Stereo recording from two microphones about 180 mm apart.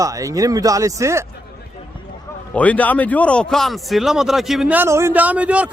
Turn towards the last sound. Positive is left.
turn(degrees=-5)  # may be behind; listen again after turning